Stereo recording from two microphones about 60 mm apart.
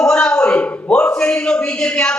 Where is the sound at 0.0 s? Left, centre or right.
Centre.